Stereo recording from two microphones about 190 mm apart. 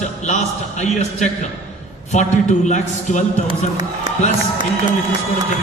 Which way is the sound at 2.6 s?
40° left (ahead or behind).